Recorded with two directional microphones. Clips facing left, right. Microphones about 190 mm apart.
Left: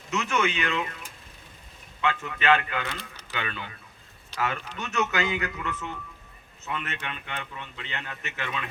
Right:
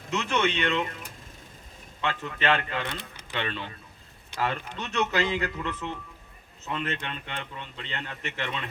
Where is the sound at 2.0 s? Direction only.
35° right (ahead or behind).